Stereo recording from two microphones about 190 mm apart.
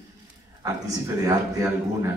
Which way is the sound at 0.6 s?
20° right (ahead or behind).